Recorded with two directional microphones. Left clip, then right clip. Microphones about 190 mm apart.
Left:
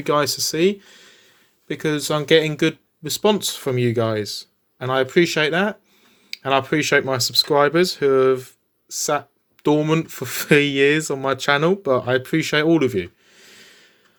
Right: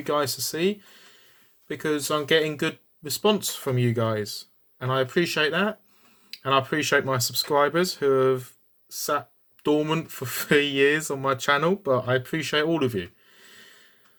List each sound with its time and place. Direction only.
0.0 s speech: 30° left (ahead or behind)